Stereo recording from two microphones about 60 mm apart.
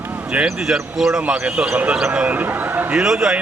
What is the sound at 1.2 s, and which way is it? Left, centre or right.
Speech, centre.